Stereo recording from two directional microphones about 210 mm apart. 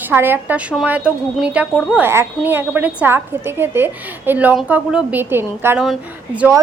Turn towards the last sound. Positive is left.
turn(degrees=-10)  # may be behind; listen again after turning